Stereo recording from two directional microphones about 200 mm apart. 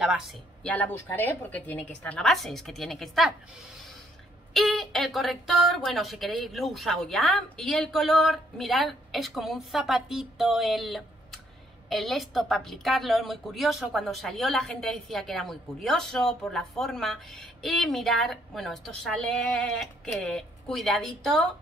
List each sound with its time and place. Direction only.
0.7 s a woman's voice: 10° left (ahead or behind)
4.6 s a woman's voice: centre (ahead or behind)